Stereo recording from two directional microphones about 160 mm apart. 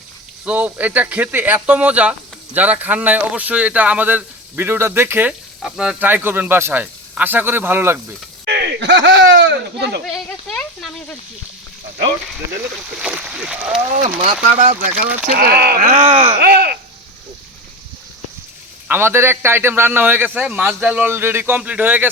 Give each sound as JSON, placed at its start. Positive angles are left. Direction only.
{"t": 0.4, "sound": "speech", "side_deg": -10}
{"t": 5.6, "sound": "speech", "side_deg": 0}
{"t": 8.4, "sound": "a sound", "side_deg": -85}
{"t": 10.1, "sound": "a sound", "side_deg": 5}
{"t": 13.0, "sound": "speech", "side_deg": -5}
{"t": 14.6, "sound": "speech", "side_deg": -50}
{"t": 15.0, "sound": "speech", "side_deg": -10}
{"t": 15.4, "sound": "speech", "side_deg": -70}
{"t": 15.9, "sound": "speech", "side_deg": -45}
{"t": 16.4, "sound": "speech", "side_deg": -80}
{"t": 18.9, "sound": "speech", "side_deg": -15}